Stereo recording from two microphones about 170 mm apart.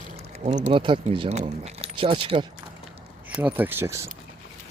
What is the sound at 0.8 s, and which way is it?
Speech, 30° right (ahead or behind).